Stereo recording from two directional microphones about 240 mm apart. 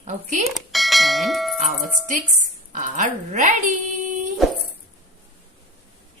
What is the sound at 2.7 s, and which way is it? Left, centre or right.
Speech, right.